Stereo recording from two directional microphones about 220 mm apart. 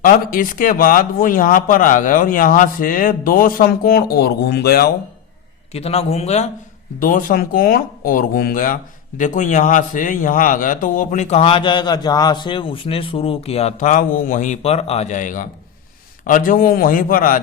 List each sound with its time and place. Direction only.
0.0 s speech: 40° left (ahead or behind)
5.7 s a man's voice: 30° left (ahead or behind)